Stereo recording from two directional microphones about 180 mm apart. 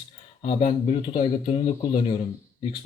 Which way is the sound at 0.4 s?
35° left (ahead or behind).